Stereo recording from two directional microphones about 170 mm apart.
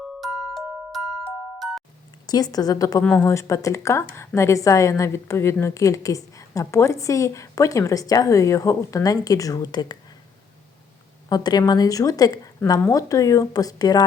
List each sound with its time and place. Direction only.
0.2 s glockenspiel: 5° right (ahead or behind)
2.2 s a woman's voice: 20° left (ahead or behind)
3.0 s a woman's voice: 5° left (ahead or behind); by 10.0 s 25° left (ahead or behind)
11.3 s a woman's voice: 25° left (ahead or behind)